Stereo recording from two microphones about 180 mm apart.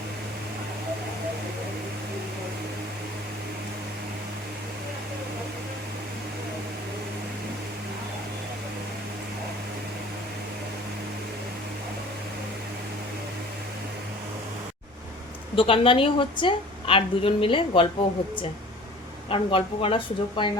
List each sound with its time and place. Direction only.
15.5 s a woman's voice: 30° left (ahead or behind)
19.3 s a woman's voice: 30° left (ahead or behind)